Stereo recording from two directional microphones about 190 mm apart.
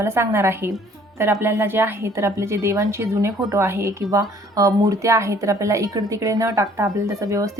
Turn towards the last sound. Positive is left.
turn(degrees=-15)  # may be behind; listen again after turning